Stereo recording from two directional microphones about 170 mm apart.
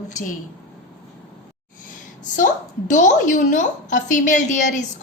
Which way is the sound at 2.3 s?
50° left (ahead or behind).